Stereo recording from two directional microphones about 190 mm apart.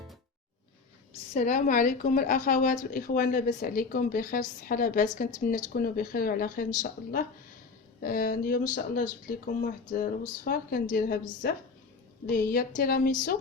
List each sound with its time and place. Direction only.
1.3 s a woman's voice: 40° left (ahead or behind)
8.0 s a woman's voice: 50° left (ahead or behind)